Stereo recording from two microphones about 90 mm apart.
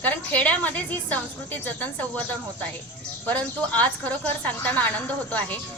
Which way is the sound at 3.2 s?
15° left (ahead or behind).